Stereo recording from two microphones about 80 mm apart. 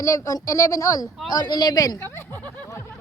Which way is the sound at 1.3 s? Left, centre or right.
Left.